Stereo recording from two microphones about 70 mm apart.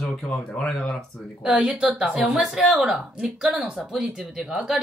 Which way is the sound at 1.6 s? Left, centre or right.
Centre.